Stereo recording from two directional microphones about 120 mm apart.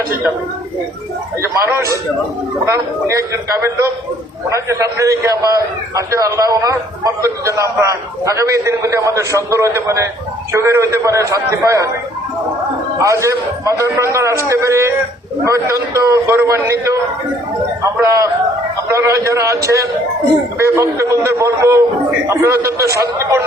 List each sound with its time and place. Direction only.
1.4 s a man's voice: 25° right (ahead or behind)
13.0 s a man's voice: 25° right (ahead or behind)